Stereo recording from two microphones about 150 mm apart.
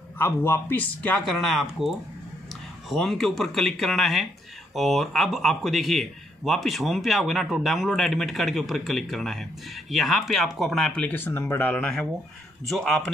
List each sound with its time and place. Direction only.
0.2 s a man's voice: 15° left (ahead or behind)